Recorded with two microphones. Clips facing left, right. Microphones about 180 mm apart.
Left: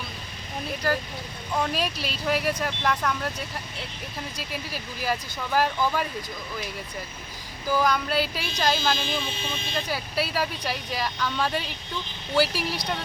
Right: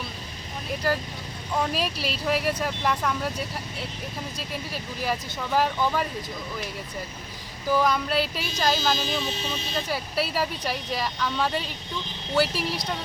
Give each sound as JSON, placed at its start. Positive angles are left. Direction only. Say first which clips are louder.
{"t": 1.5, "sound": "speech", "louder": "even", "side_deg": 0}
{"t": 4.4, "sound": "speech", "louder": "right 1 dB", "side_deg": 0}
{"t": 7.7, "sound": "speech", "louder": "right 1 dB", "side_deg": 0}
{"t": 9.0, "sound": "speech", "louder": "right 2 dB", "side_deg": -40}
{"t": 9.7, "sound": "speech", "louder": "even", "side_deg": 0}